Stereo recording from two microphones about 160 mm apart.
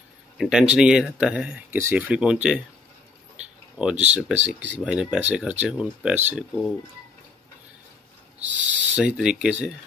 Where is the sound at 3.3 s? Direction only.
5° right (ahead or behind).